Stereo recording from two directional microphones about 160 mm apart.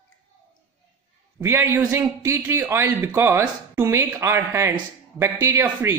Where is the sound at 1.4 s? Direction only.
15° right (ahead or behind).